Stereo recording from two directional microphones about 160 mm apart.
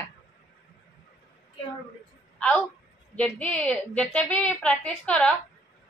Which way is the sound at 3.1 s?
5° left (ahead or behind).